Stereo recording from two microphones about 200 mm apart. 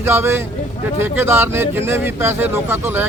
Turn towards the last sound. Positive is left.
turn(degrees=-10)  # may be behind; listen again after turning